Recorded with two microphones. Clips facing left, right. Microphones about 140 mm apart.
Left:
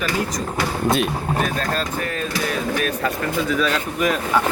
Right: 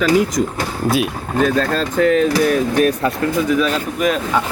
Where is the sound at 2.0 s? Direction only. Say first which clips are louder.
Right 12 dB; 85° right.